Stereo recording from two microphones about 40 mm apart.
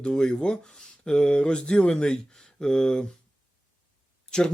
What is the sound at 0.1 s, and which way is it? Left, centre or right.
Speech, centre.